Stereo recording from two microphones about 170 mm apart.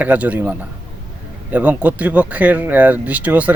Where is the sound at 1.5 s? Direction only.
10° right (ahead or behind).